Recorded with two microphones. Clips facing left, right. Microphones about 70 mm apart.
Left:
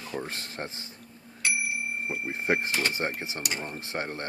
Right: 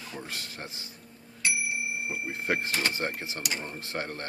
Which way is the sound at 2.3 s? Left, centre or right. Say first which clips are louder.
Left 3 dB; left.